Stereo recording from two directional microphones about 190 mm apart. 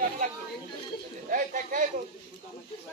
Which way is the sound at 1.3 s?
45° right (ahead or behind).